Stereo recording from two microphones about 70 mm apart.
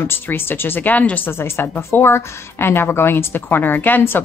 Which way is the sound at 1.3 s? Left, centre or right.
Left.